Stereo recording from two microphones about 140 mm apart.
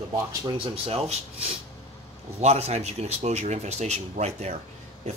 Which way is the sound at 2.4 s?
50° right (ahead or behind).